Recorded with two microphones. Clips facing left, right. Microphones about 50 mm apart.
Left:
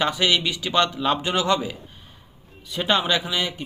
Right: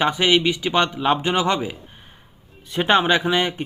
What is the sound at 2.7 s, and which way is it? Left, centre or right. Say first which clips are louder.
Speech: right 4 dB; right.